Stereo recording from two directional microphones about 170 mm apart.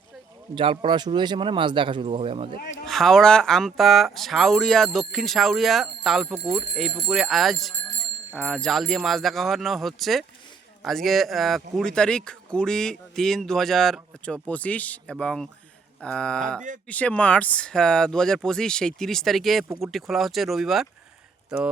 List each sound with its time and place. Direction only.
0.5 s speech: 30° right (ahead or behind)
2.8 s speech: 5° left (ahead or behind)